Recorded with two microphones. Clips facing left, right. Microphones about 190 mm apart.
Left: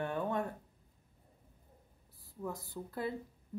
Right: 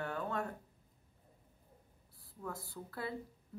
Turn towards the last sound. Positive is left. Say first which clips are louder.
# left 4 dB
turn(degrees=15)  # may be behind; listen again after turning